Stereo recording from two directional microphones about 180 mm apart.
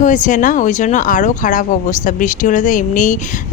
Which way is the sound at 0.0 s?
45° left (ahead or behind).